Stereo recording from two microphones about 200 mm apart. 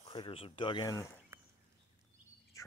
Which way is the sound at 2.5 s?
15° left (ahead or behind).